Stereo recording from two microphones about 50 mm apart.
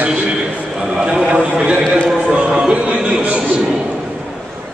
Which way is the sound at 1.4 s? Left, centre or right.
Right.